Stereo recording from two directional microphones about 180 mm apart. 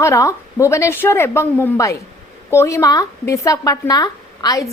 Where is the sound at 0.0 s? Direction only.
15° left (ahead or behind).